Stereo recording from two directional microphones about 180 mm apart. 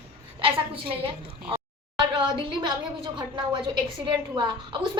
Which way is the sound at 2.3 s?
25° right (ahead or behind).